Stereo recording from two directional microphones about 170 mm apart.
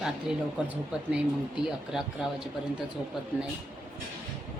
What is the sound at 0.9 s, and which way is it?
Speech, 5° right (ahead or behind).